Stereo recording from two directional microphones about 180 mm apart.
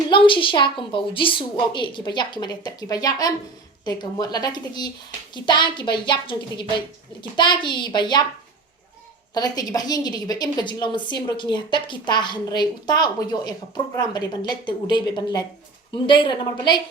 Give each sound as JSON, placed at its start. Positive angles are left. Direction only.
{"t": 0.1, "sound": "a woman's voice", "side_deg": 30}
{"t": 9.3, "sound": "a woman's voice", "side_deg": 20}